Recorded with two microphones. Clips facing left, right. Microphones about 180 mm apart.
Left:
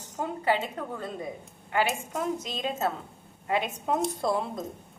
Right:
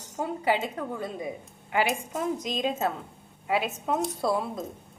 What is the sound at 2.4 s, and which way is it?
A woman's voice, 10° right (ahead or behind).